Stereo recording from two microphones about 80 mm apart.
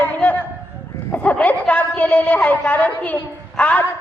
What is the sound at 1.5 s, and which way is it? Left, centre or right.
A woman's voice, centre.